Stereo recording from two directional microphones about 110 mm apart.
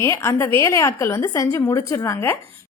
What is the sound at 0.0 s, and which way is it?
A woman's voice, 25° left (ahead or behind).